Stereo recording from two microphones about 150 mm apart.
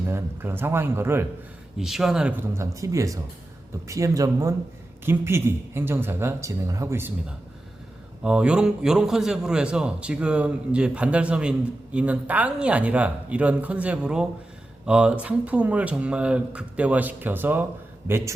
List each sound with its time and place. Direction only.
0.1 s a man's voice: 15° right (ahead or behind)
1.8 s speech: 5° right (ahead or behind)
2.5 s a man's voice: 20° right (ahead or behind)